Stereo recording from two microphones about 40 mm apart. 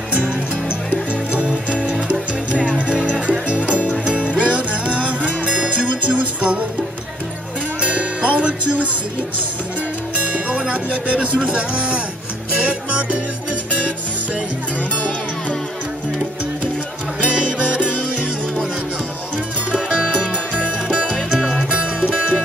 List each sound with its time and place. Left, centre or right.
0.1 s music: right
7.8 s music: right
10.2 s music: right
10.7 s speech: right
12.5 s music: right
17.2 s music: right
19.7 s music: right